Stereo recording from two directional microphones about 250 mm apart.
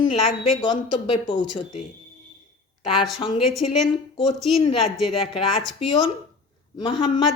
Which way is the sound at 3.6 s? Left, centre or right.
Left.